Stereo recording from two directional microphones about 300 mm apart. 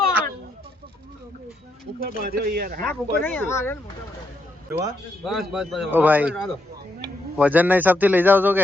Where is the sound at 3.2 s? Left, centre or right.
Centre.